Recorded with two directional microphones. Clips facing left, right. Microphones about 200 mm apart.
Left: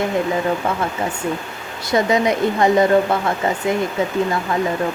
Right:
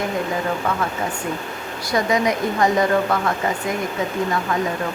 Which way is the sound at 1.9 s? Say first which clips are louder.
Left 3 dB; 25° left (ahead or behind).